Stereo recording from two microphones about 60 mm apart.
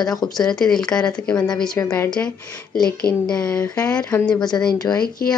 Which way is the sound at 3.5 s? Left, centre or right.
Left.